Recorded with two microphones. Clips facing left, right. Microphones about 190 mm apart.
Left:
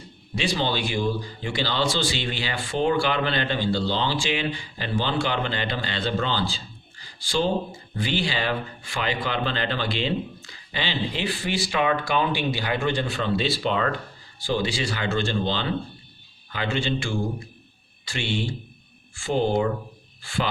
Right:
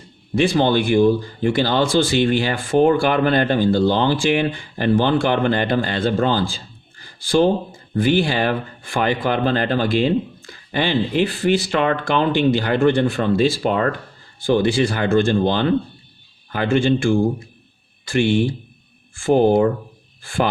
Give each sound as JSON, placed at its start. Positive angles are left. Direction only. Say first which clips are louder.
{"t": 0.3, "sound": "speech", "louder": "right 9 dB", "side_deg": -50}